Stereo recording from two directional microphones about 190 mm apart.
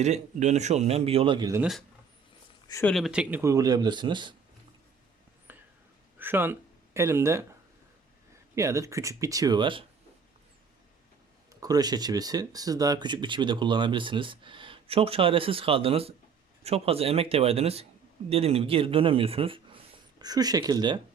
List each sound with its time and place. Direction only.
0.0 s speech: 35° right (ahead or behind); by 1.6 s 20° right (ahead or behind)
2.8 s speech: centre (ahead or behind); by 4.4 s 25° right (ahead or behind)
5.5 s whispering: 10° right (ahead or behind)
6.1 s speech: 10° right (ahead or behind)
8.5 s speech: 15° right (ahead or behind)
11.6 s speech: 20° right (ahead or behind)